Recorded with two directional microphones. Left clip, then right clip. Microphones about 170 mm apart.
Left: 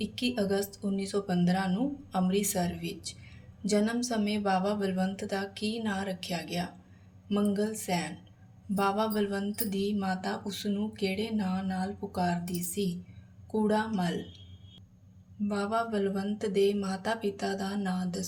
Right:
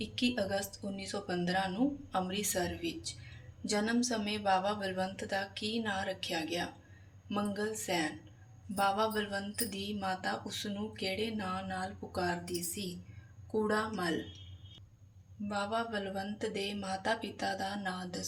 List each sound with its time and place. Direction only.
0.0 s speech: 30° left (ahead or behind)
15.4 s speech: 30° left (ahead or behind)